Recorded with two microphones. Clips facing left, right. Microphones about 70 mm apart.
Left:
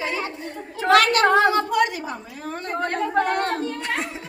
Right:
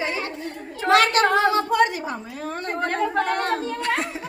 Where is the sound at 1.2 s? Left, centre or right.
Left.